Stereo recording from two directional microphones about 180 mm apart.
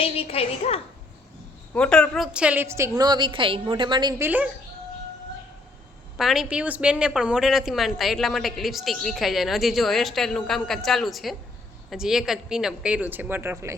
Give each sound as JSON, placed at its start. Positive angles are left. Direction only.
{"t": 0.0, "sound": "a woman's voice", "side_deg": 35}
{"t": 1.7, "sound": "a woman's voice", "side_deg": 5}
{"t": 4.2, "sound": "speech", "side_deg": -10}
{"t": 6.1, "sound": "a woman's voice", "side_deg": 0}